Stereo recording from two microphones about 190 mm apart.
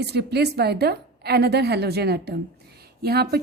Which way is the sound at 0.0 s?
60° right (ahead or behind).